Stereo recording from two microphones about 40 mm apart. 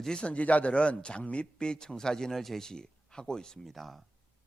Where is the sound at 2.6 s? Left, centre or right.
Centre.